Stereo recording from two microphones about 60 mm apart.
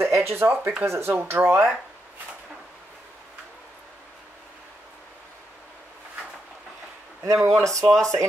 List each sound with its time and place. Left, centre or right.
0.0 s a sound: right
0.8 s speech: right
1.1 s speech: right
7.2 s speech: right
7.9 s speech: centre